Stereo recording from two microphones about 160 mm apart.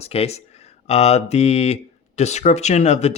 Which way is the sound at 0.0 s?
40° left (ahead or behind).